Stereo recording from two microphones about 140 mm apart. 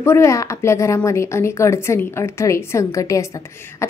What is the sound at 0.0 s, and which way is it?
A woman's voice, 20° left (ahead or behind).